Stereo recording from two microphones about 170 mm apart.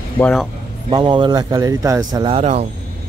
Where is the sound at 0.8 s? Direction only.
30° right (ahead or behind).